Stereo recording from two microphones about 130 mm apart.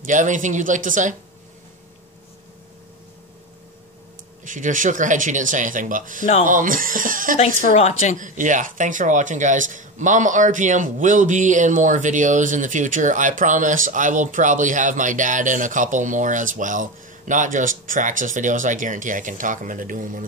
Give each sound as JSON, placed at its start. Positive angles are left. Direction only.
{"t": 0.0, "sound": "speech", "side_deg": -80}
{"t": 4.5, "sound": "speech", "side_deg": -85}
{"t": 7.6, "sound": "a woman's voice", "side_deg": 65}
{"t": 8.2, "sound": "speech", "side_deg": -80}